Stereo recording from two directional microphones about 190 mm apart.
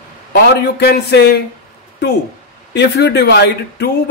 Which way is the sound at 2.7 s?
60° left (ahead or behind).